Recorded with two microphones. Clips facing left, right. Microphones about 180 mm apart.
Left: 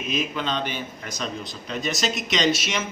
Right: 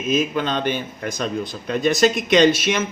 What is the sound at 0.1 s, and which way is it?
Speech, 50° right (ahead or behind).